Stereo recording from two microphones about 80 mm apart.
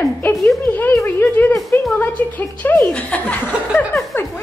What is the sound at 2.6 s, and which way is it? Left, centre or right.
Speech, left.